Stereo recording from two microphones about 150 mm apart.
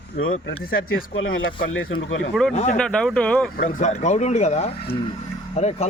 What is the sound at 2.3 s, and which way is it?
Speech, 5° left (ahead or behind).